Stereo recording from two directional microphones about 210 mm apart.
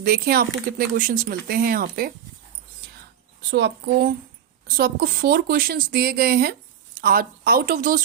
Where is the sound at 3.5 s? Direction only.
55° right (ahead or behind).